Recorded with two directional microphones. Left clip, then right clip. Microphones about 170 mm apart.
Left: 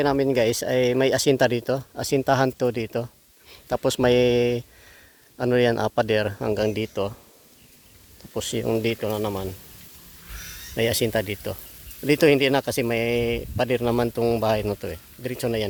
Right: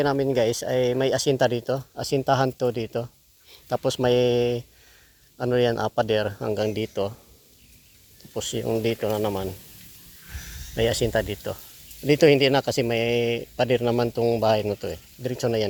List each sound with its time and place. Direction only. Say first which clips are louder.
0.0 s speech: left 1 dB; 30° left (ahead or behind)
6.7 s speech: even; 25° left (ahead or behind)
8.3 s speech: left 1 dB; 35° left (ahead or behind)
10.8 s speech: even; 35° left (ahead or behind)
12.0 s speech: right 1 dB; 20° left (ahead or behind)
14.4 s speech: right 1 dB; 20° left (ahead or behind)